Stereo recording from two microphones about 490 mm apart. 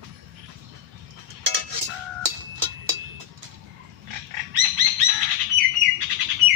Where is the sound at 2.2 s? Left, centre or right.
Right.